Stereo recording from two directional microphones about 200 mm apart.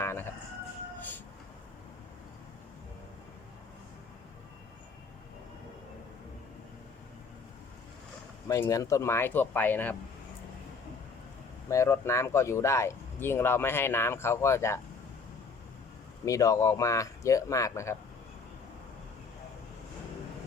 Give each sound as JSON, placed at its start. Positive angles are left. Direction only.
{"t": 0.0, "sound": "a sound", "side_deg": 15}
{"t": 8.4, "sound": "speech", "side_deg": 15}
{"t": 11.7, "sound": "speech", "side_deg": 15}
{"t": 16.2, "sound": "speech", "side_deg": 15}